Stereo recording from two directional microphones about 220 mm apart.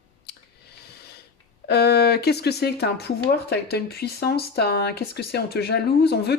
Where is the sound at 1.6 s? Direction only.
45° left (ahead or behind).